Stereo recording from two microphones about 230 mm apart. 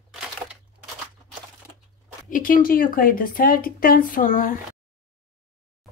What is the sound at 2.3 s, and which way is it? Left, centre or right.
Speech, left.